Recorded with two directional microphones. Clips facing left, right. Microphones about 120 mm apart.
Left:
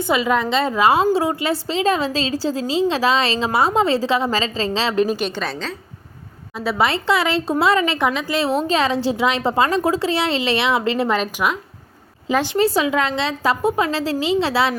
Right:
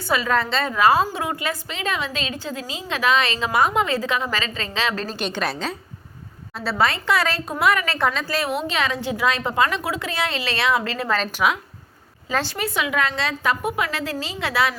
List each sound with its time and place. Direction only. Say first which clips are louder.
0.0 s a woman's voice: left 3 dB; 20° left (ahead or behind)
4.9 s a woman's voice: left 11 dB; 10° left (ahead or behind)
5.2 s a woman's voice: left 1 dB; centre (ahead or behind)
6.7 s a woman's voice: left 3 dB; 20° left (ahead or behind)
8.5 s a woman's voice: left 6 dB; 35° left (ahead or behind)
11.4 s a woman's voice: right 3 dB; centre (ahead or behind)
12.5 s a woman's voice: left 6 dB; 30° left (ahead or behind)